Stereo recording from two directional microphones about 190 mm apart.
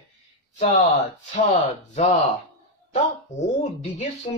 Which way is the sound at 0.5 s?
40° left (ahead or behind).